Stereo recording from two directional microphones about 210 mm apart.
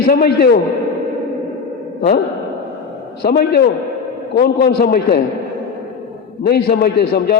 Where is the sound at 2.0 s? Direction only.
50° left (ahead or behind).